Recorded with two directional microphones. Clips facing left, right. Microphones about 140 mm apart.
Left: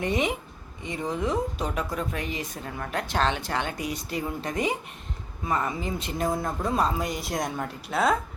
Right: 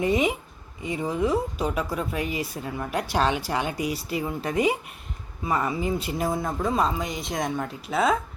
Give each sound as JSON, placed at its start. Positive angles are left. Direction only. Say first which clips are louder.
{"t": 0.0, "sound": "speech", "louder": "right 3 dB", "side_deg": -5}